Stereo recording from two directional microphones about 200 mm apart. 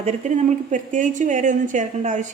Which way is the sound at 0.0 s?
40° right (ahead or behind).